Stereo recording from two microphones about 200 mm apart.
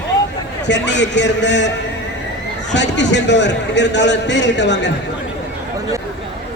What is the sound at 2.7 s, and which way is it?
A man's voice, 60° left (ahead or behind).